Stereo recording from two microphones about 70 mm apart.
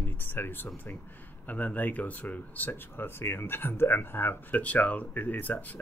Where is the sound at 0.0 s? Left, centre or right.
Left.